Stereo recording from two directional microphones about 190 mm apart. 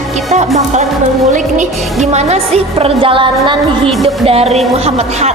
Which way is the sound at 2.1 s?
35° right (ahead or behind).